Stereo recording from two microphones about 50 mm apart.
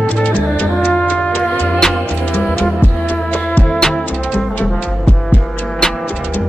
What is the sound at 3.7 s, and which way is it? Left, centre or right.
Music, centre.